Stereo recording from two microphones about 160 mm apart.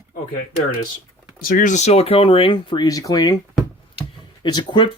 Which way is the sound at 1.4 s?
60° left (ahead or behind).